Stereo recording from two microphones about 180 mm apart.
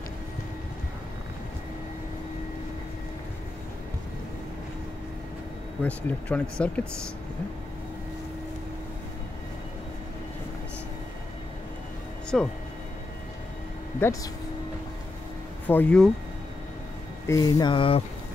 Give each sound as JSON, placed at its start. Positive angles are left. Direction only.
{"t": 5.8, "sound": "speech", "side_deg": 10}
{"t": 12.3, "sound": "speech", "side_deg": 0}
{"t": 13.9, "sound": "speech", "side_deg": 15}
{"t": 15.6, "sound": "speech", "side_deg": 10}
{"t": 17.3, "sound": "a sound", "side_deg": 20}